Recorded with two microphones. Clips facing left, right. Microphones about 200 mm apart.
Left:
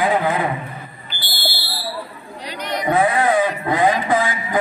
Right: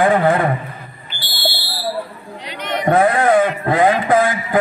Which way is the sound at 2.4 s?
40° left (ahead or behind).